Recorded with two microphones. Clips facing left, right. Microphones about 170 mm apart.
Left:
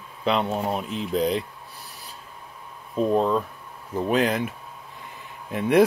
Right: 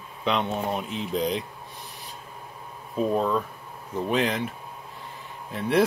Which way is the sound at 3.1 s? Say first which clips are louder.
Left 3 dB; 30° left (ahead or behind).